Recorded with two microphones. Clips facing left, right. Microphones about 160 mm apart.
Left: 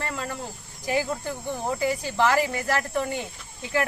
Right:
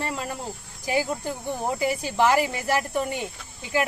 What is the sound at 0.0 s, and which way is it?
Cricket, 15° right (ahead or behind).